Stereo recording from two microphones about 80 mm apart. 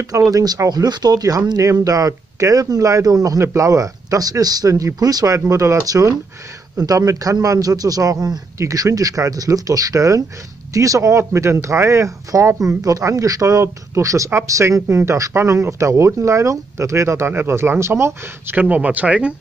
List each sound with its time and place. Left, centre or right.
0.0 s speech: right
18.6 s speech: centre